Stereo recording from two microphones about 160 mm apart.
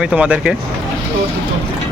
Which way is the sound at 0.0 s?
5° right (ahead or behind).